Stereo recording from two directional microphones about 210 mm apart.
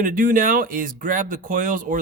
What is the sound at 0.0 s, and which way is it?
Speech, 40° right (ahead or behind).